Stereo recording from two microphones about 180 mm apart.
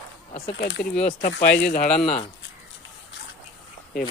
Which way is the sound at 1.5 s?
65° left (ahead or behind).